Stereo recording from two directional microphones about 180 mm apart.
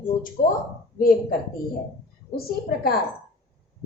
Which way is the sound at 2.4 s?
55° left (ahead or behind).